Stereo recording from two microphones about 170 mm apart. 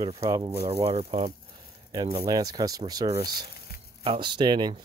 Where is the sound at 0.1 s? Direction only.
25° right (ahead or behind).